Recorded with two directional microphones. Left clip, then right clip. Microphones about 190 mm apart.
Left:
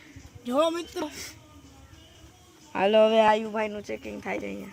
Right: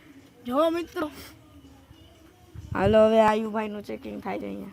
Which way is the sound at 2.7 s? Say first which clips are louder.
Right 1 dB; 65° right (ahead or behind).